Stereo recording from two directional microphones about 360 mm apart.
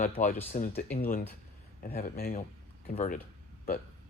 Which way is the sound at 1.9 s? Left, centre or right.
Left.